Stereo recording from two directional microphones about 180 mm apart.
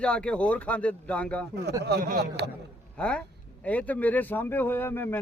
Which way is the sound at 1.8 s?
60° right (ahead or behind).